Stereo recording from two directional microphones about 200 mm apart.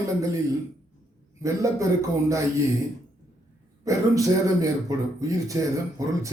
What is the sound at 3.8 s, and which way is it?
A man's voice, 15° right (ahead or behind).